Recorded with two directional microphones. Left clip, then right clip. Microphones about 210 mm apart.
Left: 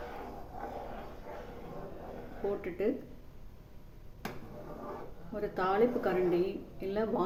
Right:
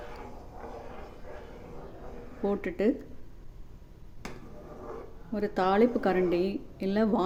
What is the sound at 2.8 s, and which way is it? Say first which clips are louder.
Speech: right 5 dB; 45° right (ahead or behind).